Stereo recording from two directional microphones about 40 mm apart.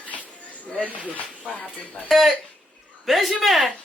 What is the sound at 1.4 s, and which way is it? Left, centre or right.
Speech, left.